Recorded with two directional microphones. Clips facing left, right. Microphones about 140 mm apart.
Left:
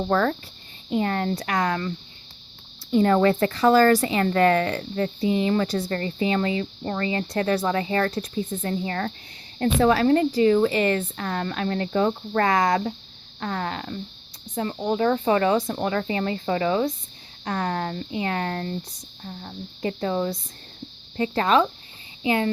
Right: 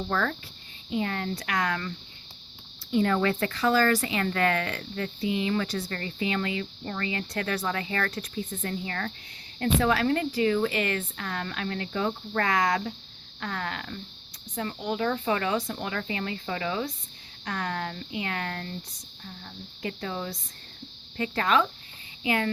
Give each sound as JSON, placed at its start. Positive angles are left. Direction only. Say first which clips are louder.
{"t": 0.1, "sound": "speech", "louder": "left 7 dB", "side_deg": 35}
{"t": 2.9, "sound": "speech", "louder": "left 6 dB", "side_deg": 35}